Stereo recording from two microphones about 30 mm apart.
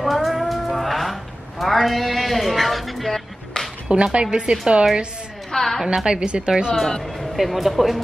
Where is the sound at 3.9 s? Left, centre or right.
Right.